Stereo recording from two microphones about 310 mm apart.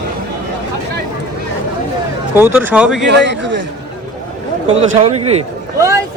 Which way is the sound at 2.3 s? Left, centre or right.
Centre.